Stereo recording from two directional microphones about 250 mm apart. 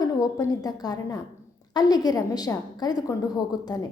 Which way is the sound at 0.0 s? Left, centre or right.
Centre.